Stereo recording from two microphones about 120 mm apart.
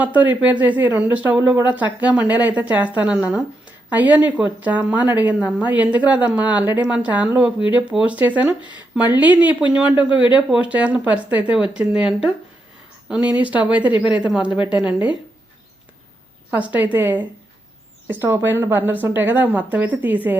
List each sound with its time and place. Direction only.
0.0 s a woman's voice: 10° right (ahead or behind)
16.5 s a woman's voice: 10° right (ahead or behind)